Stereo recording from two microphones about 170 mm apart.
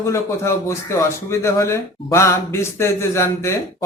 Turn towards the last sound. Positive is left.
turn(degrees=15)  # may be behind; listen again after turning